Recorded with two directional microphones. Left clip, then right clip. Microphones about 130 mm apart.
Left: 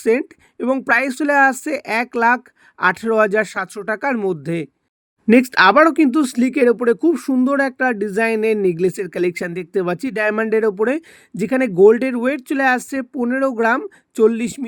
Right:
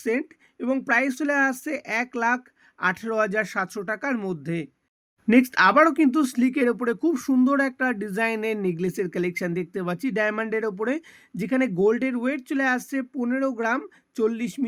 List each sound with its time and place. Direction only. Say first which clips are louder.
0.0 s speech: left 9 dB; 50° left (ahead or behind)